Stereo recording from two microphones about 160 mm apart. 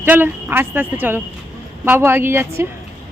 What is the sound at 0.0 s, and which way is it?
Speech, 10° right (ahead or behind).